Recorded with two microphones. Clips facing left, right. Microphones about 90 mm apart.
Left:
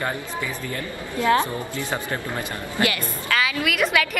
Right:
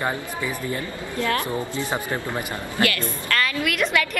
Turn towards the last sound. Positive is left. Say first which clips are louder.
# left 1 dB
turn(degrees=5)  # may be behind; listen again after turning